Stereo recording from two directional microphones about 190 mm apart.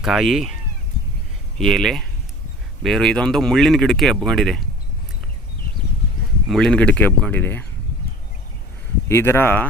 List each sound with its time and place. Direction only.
0.0 s speech: centre (ahead or behind)
1.5 s speech: centre (ahead or behind)
6.5 s speech: 5° left (ahead or behind)
9.0 s speech: 15° left (ahead or behind)